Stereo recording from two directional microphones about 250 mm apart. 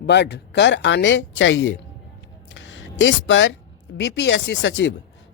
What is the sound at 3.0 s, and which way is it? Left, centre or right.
Speech, left.